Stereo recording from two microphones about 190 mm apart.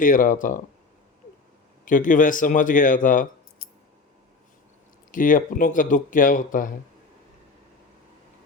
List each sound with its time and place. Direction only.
0.0 s speech: 45° left (ahead or behind)
1.8 s speech: 45° left (ahead or behind)
5.1 s speech: 45° left (ahead or behind)